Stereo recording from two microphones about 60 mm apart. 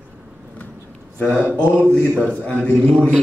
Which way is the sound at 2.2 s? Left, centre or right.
Left.